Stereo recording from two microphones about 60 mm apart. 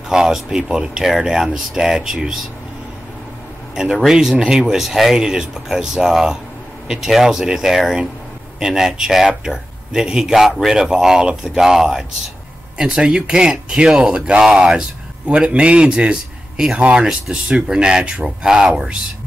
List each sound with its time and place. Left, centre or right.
0.1 s speech: centre
3.7 s speech: centre